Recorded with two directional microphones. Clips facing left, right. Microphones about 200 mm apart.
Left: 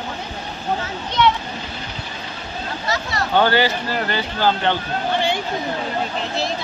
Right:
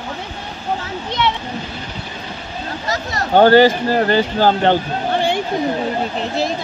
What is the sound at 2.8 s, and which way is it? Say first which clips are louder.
Speech: right 1 dB; 45° right (ahead or behind).